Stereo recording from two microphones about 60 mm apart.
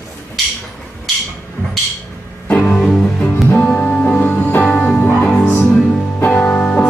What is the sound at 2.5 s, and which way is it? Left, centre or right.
Music, left.